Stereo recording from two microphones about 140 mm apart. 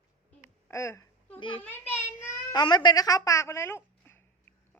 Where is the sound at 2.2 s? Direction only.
20° left (ahead or behind).